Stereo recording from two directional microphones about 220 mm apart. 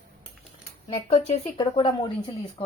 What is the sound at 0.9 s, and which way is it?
Speech, 25° left (ahead or behind).